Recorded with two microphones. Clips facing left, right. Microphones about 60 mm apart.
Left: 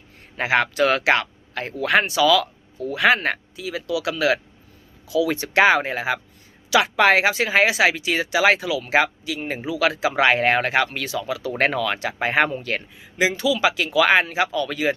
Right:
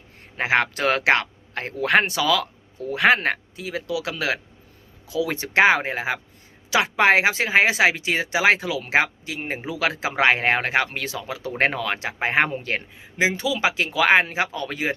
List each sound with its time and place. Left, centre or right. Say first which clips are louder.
0.3 s speech: left 1 dB; right
0.7 s speech: left 1 dB; right